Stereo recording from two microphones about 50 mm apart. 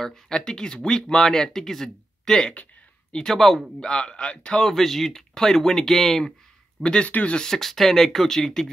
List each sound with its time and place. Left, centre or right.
0.0 s speech: centre
2.5 s a sound: left
3.2 s speech: centre
3.8 s speech: centre
4.6 s speech: centre
6.8 s speech: centre
7.1 s speech: left
7.3 s speech: centre